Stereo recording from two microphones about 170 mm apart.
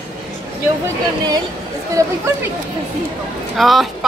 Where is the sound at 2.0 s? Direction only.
20° right (ahead or behind).